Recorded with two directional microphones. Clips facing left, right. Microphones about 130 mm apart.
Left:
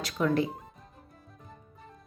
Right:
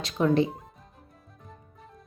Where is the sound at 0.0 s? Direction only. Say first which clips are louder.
Right 4 dB; 25° right (ahead or behind).